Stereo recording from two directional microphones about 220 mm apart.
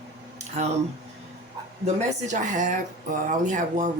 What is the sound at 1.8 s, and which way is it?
Speech, 35° right (ahead or behind).